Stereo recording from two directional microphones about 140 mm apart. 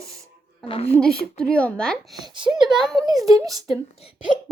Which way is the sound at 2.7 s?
Centre (ahead or behind).